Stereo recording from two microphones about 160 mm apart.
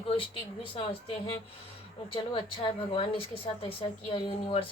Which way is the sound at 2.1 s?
35° left (ahead or behind).